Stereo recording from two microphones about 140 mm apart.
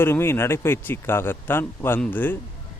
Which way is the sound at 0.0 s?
15° left (ahead or behind).